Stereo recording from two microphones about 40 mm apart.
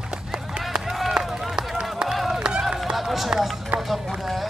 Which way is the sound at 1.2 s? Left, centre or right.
Centre.